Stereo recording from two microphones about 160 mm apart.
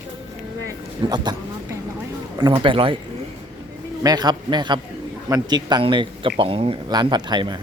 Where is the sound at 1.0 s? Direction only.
25° right (ahead or behind).